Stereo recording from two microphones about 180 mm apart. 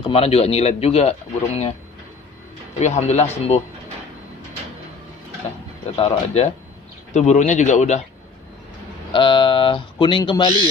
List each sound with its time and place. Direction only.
0.0 s speech: 35° left (ahead or behind)
2.8 s speech: 40° left (ahead or behind)
5.9 s speech: 35° left (ahead or behind)
9.1 s speech: 25° left (ahead or behind)